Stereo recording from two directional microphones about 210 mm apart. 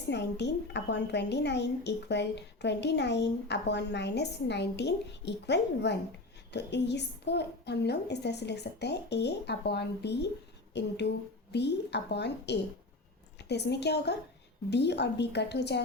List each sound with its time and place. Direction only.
0.1 s a woman's voice: 55° left (ahead or behind)